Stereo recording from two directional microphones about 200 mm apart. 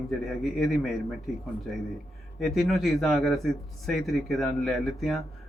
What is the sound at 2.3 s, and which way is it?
Speech, centre (ahead or behind).